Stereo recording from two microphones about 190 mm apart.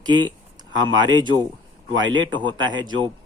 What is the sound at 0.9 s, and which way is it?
Speech, 25° right (ahead or behind).